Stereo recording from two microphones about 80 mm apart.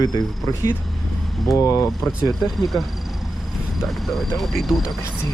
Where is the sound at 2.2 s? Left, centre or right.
Centre.